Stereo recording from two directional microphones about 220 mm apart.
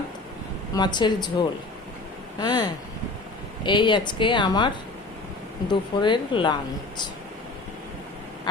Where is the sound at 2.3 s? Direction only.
20° left (ahead or behind).